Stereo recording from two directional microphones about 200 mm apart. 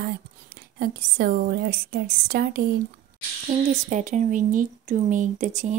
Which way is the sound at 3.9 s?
40° right (ahead or behind).